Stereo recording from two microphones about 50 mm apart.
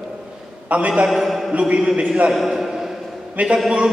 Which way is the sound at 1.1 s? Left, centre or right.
Centre.